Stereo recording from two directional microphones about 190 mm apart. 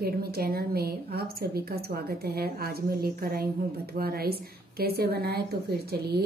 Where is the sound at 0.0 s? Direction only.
55° right (ahead or behind).